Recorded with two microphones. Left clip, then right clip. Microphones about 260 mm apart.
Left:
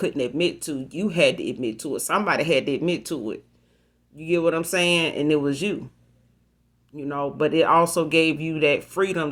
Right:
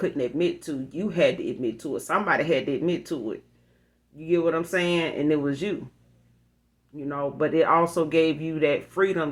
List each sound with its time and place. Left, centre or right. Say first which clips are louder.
0.0 s speech: left 2 dB; left
6.9 s speech: left 2 dB; left